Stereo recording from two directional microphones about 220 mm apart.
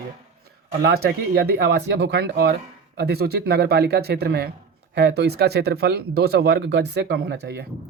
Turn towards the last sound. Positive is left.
turn(degrees=-50)  # may be behind; listen again after turning